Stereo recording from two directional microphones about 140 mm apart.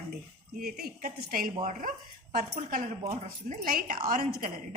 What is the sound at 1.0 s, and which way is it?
Speech, 90° right.